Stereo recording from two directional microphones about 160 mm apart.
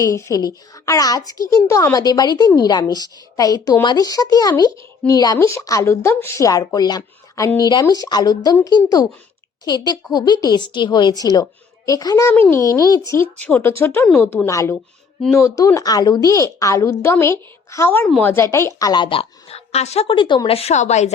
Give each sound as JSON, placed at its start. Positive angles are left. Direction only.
{"t": 0.0, "sound": "a woman's voice", "side_deg": 20}
{"t": 13.3, "sound": "a woman's voice", "side_deg": 10}